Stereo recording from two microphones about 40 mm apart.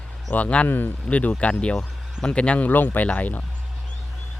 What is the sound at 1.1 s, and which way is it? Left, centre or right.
Speech, left.